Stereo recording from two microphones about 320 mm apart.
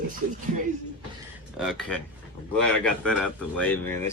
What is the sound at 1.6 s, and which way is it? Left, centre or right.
Speech, centre.